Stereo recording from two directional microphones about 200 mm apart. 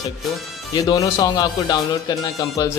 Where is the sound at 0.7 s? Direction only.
20° left (ahead or behind).